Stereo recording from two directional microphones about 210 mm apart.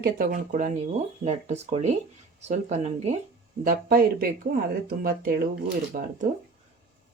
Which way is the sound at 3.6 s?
40° right (ahead or behind).